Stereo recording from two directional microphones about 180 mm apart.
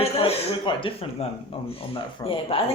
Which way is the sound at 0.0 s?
30° left (ahead or behind).